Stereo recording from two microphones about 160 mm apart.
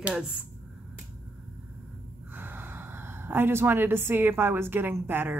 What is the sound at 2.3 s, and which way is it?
Speech, 15° right (ahead or behind).